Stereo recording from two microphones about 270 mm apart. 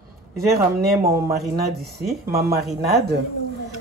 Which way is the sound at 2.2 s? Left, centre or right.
Right.